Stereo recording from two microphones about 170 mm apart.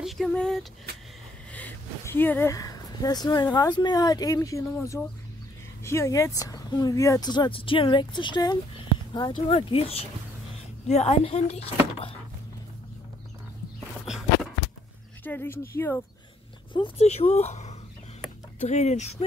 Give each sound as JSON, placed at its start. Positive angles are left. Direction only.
{"t": 0.0, "sound": "speech", "side_deg": 0}
{"t": 0.9, "sound": "vehicle", "side_deg": -70}
{"t": 1.5, "sound": "speech", "side_deg": 10}
{"t": 5.9, "sound": "speech", "side_deg": 15}
{"t": 14.0, "sound": "walk", "side_deg": -5}
{"t": 15.2, "sound": "speech", "side_deg": 10}
{"t": 16.7, "sound": "speech", "side_deg": 35}